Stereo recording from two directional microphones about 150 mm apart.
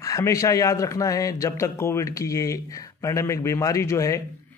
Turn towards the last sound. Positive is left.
turn(degrees=20)  # may be behind; listen again after turning